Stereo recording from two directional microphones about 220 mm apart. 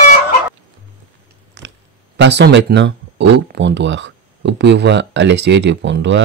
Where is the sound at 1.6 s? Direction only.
55° right (ahead or behind).